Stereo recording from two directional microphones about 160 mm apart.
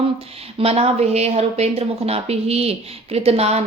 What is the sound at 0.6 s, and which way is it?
Speech, 40° right (ahead or behind).